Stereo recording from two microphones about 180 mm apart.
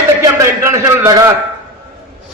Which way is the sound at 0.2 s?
15° right (ahead or behind).